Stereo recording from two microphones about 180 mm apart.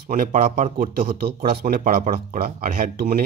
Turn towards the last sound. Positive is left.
turn(degrees=-55)  # may be behind; listen again after turning